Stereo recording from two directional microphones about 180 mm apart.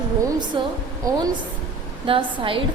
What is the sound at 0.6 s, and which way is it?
Speech, 25° right (ahead or behind).